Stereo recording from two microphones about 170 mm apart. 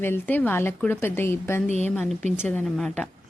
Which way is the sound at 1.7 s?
40° right (ahead or behind).